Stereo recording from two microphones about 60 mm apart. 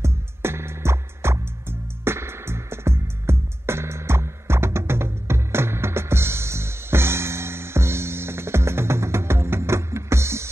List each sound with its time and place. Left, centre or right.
0.0 s music: right